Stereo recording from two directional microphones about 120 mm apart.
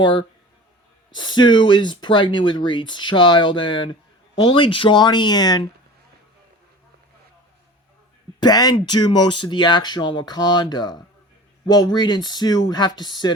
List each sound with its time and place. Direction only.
0.0 s speech: 40° left (ahead or behind)
8.4 s speech: 35° left (ahead or behind)